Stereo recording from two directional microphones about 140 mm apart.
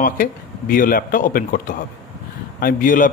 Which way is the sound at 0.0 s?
85° left.